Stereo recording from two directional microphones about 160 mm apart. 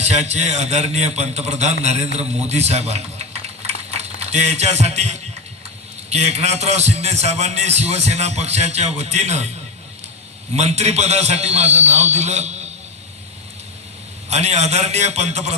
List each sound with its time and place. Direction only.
0.0 s a man's voice: 45° right (ahead or behind)
10.5 s a man's voice: 45° right (ahead or behind)
14.3 s a man's voice: 45° right (ahead or behind)